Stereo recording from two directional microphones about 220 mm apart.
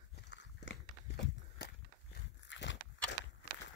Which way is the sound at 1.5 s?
50° left (ahead or behind).